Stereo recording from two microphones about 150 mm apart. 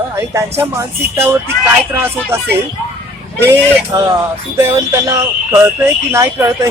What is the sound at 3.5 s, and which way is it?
Speech, 15° right (ahead or behind).